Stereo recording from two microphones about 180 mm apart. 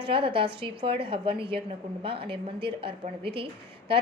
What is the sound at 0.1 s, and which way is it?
A woman's voice, 30° right (ahead or behind).